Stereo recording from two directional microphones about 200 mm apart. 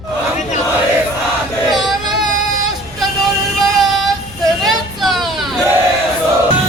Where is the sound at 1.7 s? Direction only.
Centre (ahead or behind).